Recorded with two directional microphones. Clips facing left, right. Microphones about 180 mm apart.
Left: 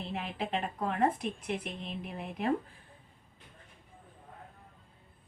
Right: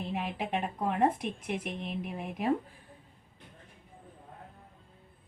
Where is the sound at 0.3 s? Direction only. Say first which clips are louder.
Right 1 dB; 15° right (ahead or behind).